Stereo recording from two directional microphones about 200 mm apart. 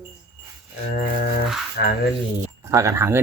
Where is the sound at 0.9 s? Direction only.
45° left (ahead or behind).